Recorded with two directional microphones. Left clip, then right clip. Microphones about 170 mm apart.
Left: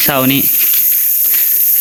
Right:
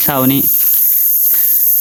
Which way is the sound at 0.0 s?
15° right (ahead or behind).